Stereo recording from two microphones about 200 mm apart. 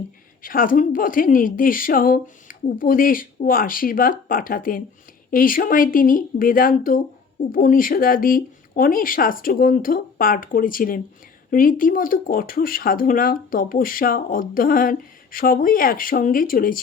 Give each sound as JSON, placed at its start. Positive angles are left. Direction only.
{"t": 0.4, "sound": "speech", "side_deg": 45}